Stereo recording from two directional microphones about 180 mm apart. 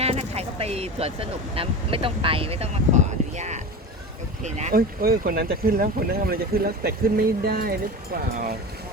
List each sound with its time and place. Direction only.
0.0 s speech: 35° right (ahead or behind)
4.7 s speech: 55° right (ahead or behind)